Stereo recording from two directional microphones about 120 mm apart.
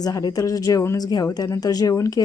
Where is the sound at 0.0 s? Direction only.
30° left (ahead or behind).